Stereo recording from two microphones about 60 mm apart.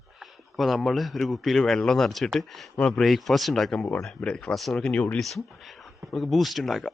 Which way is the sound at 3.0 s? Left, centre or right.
Centre.